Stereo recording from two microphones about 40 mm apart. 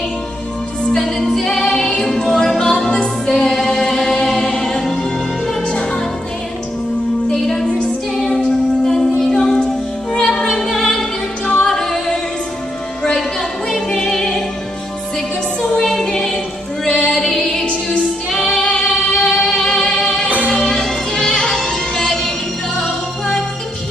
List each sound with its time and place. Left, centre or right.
0.8 s music: centre
7.3 s music: centre
8.8 s music: centre
13.7 s music: centre
15.8 s music: centre
16.8 s female singing: left
17.1 s music: centre
18.3 s female singing: centre
18.6 s music: left
18.9 s music: centre